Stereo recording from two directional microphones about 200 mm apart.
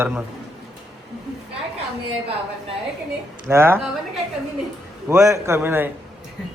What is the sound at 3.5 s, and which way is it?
Speech, 10° right (ahead or behind).